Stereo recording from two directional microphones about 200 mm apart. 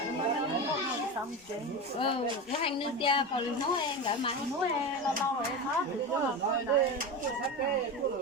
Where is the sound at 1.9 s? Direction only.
25° left (ahead or behind).